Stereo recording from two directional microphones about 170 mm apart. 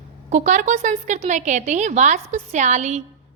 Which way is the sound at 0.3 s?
45° right (ahead or behind).